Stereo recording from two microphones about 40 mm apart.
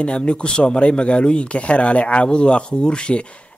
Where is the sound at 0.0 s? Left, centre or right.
Left.